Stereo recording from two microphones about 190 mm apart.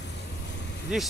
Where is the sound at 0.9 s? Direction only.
5° right (ahead or behind).